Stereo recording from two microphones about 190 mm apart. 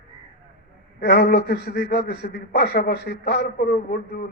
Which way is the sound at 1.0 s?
55° left (ahead or behind).